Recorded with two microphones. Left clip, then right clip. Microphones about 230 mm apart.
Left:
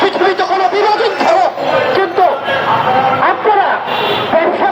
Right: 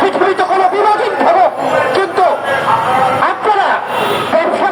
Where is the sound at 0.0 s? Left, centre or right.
Right.